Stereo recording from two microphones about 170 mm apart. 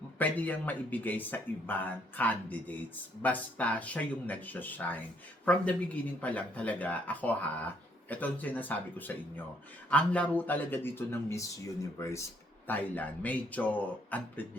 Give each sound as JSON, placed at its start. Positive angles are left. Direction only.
{"t": 0.2, "sound": "speech", "side_deg": 10}